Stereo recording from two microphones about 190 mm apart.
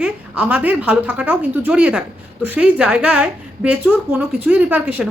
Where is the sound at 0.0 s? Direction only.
5° right (ahead or behind).